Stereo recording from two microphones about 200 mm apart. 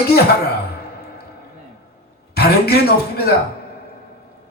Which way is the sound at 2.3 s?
55° left (ahead or behind).